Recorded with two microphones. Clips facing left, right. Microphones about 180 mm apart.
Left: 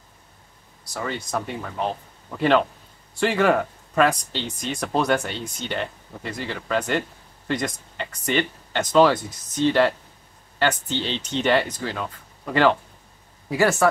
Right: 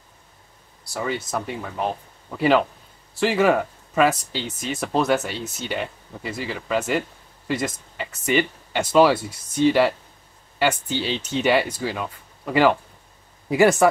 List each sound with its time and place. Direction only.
1.0 s speech: 5° right (ahead or behind)